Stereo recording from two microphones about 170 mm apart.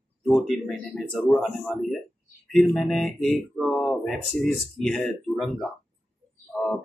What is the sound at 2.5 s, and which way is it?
Speech, centre (ahead or behind).